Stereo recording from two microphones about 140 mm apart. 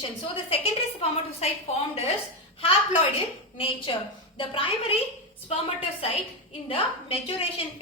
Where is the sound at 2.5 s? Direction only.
40° left (ahead or behind).